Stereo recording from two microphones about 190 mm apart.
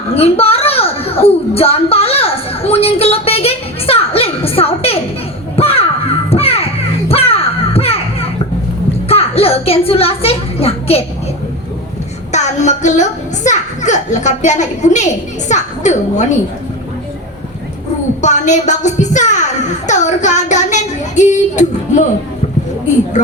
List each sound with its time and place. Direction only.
0.1 s a child's voice: 30° left (ahead or behind)
5.5 s crow: 30° left (ahead or behind)
6.3 s children playing: 30° left (ahead or behind)
9.0 s a sound: 30° left (ahead or behind)
12.3 s a child's voice: 40° left (ahead or behind)
18.2 s speech: 40° left (ahead or behind)